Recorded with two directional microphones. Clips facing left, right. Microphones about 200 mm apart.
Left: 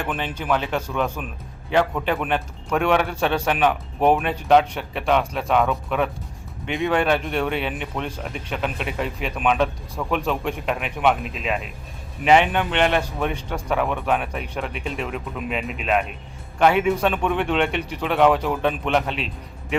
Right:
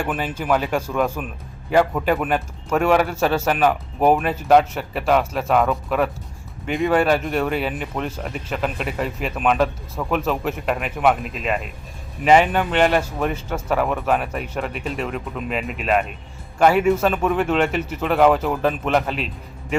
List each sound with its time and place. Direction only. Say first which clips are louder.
0.1 s speech: right 1 dB; 5° right (ahead or behind)